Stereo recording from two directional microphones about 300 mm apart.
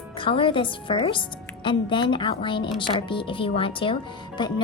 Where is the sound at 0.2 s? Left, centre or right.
Centre.